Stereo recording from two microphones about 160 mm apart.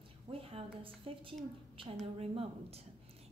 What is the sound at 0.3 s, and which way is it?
A woman's voice, 35° right (ahead or behind).